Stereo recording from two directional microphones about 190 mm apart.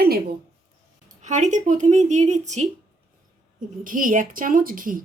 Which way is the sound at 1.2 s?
40° right (ahead or behind).